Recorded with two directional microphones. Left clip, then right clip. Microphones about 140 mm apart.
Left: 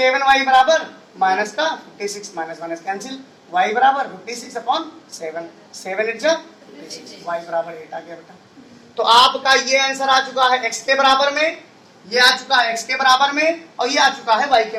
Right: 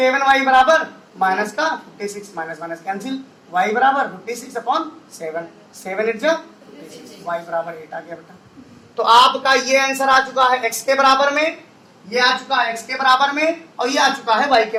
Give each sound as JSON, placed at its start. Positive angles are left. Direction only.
{"t": 0.0, "sound": "speech", "side_deg": -35}
{"t": 9.7, "sound": "speech", "side_deg": -25}
{"t": 11.1, "sound": "speech", "side_deg": -40}